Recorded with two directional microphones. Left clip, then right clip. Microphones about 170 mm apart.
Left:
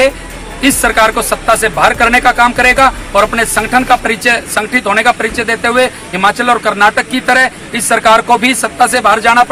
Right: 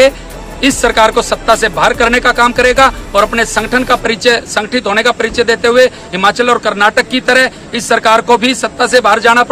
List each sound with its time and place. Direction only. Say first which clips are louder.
0.6 s speech: even; 35° right (ahead or behind)